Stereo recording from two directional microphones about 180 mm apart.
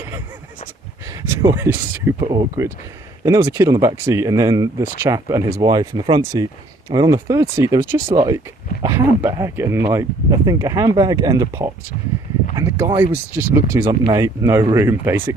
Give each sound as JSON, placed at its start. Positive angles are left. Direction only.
{"t": 1.1, "sound": "speech", "side_deg": -15}